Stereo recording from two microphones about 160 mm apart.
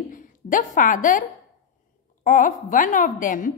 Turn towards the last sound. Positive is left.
turn(degrees=55)  # may be behind; listen again after turning